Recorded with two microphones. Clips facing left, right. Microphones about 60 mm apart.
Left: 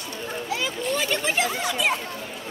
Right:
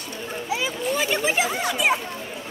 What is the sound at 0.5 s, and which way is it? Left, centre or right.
Speech, centre.